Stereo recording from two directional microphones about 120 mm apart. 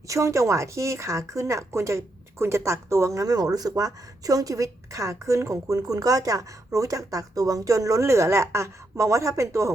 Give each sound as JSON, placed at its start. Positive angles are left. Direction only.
{"t": 0.1, "sound": "speech", "side_deg": -25}